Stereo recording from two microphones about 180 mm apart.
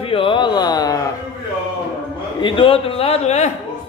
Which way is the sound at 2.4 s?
30° left (ahead or behind).